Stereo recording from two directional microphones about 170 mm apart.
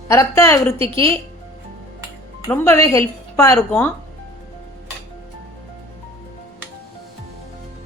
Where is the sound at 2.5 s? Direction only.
15° left (ahead or behind).